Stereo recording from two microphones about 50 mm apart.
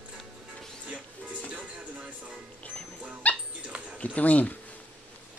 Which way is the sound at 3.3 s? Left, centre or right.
Left.